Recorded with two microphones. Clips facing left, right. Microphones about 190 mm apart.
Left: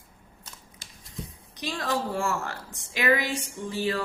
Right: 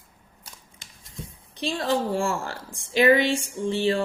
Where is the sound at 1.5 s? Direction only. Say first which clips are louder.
Right 4 dB; 30° right (ahead or behind).